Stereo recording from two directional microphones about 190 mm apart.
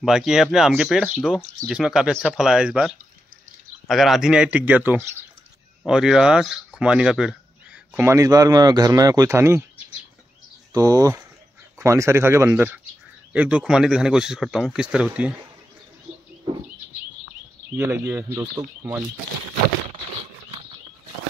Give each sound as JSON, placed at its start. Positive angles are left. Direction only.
{"t": 0.0, "sound": "speech", "side_deg": 0}
{"t": 10.7, "sound": "speech", "side_deg": -20}
{"t": 17.7, "sound": "speech", "side_deg": -10}